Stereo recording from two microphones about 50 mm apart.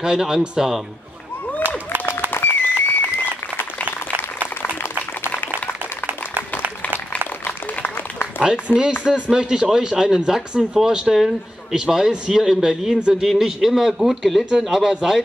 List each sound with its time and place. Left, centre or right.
0.0 s speech: centre
1.6 s applause: right
2.3 s music: left
7.4 s a sound: left
8.6 s a man's voice: centre